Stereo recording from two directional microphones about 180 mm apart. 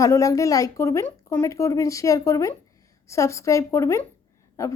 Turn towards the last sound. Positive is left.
turn(degrees=15)  # may be behind; listen again after turning